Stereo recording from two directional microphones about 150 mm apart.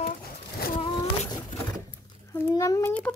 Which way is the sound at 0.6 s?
90° left.